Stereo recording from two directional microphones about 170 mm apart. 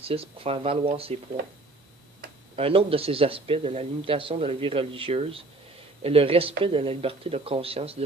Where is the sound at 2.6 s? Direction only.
35° right (ahead or behind).